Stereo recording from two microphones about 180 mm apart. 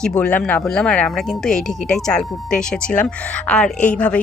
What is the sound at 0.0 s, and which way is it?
A woman's voice, 10° left (ahead or behind).